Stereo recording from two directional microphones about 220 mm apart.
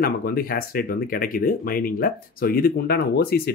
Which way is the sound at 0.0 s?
45° left (ahead or behind).